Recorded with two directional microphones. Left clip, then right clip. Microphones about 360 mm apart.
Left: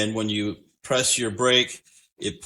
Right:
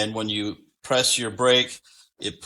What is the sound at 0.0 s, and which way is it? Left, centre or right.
Speech, centre.